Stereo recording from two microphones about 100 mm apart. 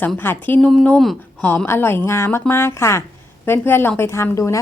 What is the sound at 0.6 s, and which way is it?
Speech, 5° left (ahead or behind).